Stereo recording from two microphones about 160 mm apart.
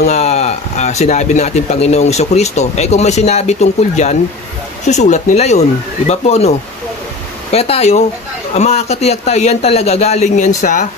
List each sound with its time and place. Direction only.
0.0 s speech: 45° left (ahead or behind)
7.5 s speech: 40° left (ahead or behind)